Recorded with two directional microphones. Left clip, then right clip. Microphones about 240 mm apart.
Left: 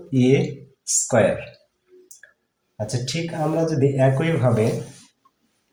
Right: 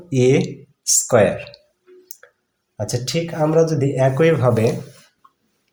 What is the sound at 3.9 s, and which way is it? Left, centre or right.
Speech, right.